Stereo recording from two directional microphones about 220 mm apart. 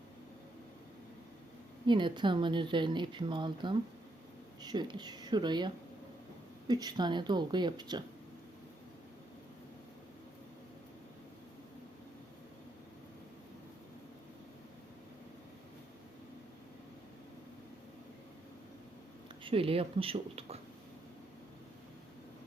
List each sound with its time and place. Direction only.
1.9 s speech: 20° right (ahead or behind)
19.5 s speech: 25° right (ahead or behind)